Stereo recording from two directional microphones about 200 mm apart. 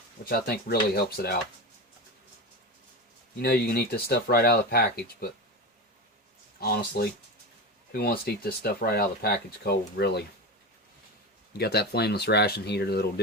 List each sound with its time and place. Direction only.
0.3 s speech: 50° left (ahead or behind)
3.3 s speech: 50° left (ahead or behind)
6.6 s speech: 50° left (ahead or behind)
11.5 s speech: 55° left (ahead or behind)